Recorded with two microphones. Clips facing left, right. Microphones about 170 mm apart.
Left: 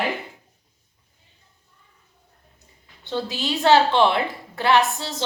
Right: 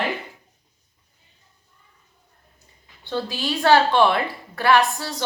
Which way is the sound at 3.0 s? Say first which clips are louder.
Even; 20° left (ahead or behind).